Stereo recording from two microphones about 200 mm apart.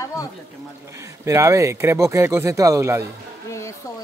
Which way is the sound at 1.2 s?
15° right (ahead or behind).